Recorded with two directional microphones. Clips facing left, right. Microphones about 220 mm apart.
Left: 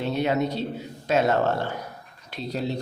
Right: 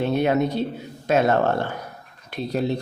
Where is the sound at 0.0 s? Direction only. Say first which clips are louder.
Right 4 dB; 55° right (ahead or behind).